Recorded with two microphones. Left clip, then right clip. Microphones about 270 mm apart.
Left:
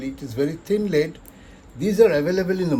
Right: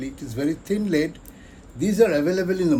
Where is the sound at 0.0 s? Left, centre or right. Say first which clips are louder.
Left 2 dB; left.